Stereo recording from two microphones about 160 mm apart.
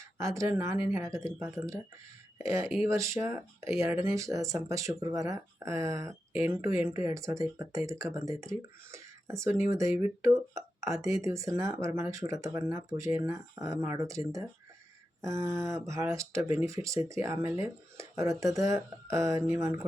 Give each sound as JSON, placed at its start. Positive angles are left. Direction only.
{"t": 0.2, "sound": "speech", "side_deg": -20}